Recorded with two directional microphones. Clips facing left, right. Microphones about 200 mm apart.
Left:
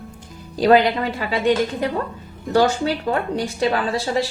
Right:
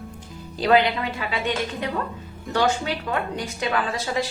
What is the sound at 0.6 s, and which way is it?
Speech, 40° left (ahead or behind).